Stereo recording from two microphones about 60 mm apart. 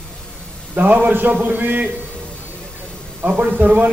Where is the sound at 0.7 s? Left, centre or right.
Right.